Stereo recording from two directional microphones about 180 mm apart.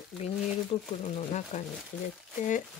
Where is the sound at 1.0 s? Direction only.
40° left (ahead or behind).